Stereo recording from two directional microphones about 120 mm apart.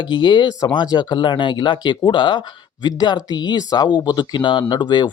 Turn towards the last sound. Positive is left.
turn(degrees=40)  # may be behind; listen again after turning